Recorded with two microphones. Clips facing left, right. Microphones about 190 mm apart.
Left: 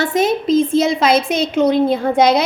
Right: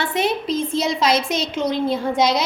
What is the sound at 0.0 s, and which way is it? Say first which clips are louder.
A woman's voice: left 5 dB; 45° left (ahead or behind).